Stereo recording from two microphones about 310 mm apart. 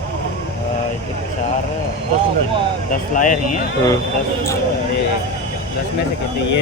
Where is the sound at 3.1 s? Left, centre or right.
Left.